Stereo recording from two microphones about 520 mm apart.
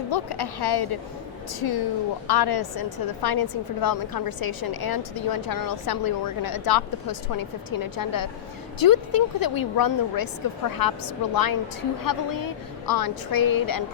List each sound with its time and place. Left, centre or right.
0.1 s a woman's voice: left